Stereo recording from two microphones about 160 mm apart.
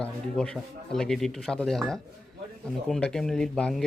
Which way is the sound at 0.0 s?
5° left (ahead or behind).